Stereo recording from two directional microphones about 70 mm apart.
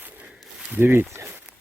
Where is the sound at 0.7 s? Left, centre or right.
Right.